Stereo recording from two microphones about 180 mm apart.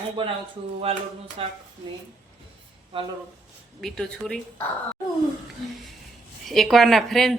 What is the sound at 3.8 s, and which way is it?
Speech, 5° left (ahead or behind).